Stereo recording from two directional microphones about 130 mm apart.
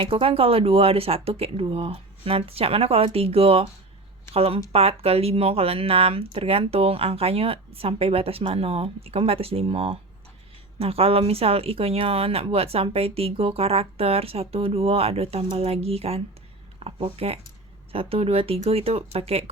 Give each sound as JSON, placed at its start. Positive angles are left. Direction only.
{"t": 0.0, "sound": "speech", "side_deg": -45}